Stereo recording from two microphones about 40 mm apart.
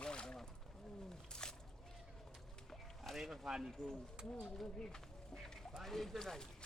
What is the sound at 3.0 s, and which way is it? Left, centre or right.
Speech, centre.